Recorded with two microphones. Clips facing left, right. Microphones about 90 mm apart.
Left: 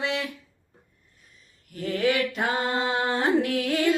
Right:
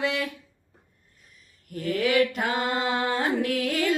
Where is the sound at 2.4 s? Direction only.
30° left (ahead or behind).